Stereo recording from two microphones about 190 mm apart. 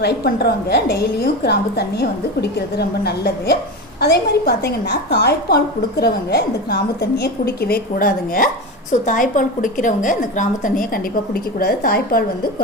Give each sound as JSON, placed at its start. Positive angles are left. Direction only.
{"t": 0.0, "sound": "a woman's voice", "side_deg": 55}